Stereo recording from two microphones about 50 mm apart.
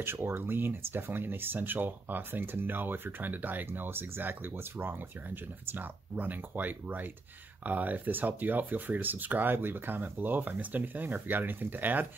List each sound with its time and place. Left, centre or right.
0.0 s speech: right